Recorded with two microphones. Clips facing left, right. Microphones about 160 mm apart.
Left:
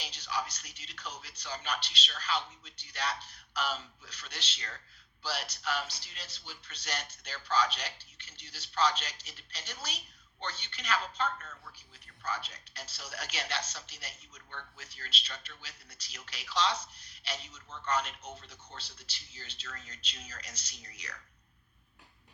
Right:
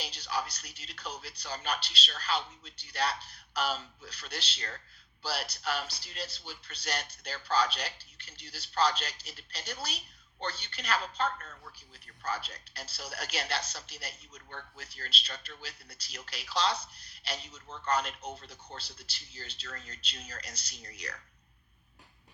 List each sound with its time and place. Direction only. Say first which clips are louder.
0.0 s a woman's voice: right 2 dB; 35° right (ahead or behind)